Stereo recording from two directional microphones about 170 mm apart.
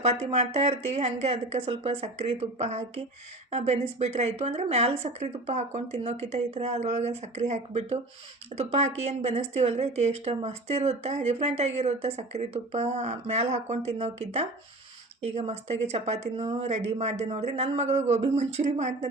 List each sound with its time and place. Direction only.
0.0 s speech: 40° right (ahead or behind)